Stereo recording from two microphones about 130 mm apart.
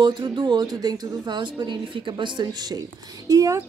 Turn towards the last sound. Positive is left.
turn(degrees=-25)  # may be behind; listen again after turning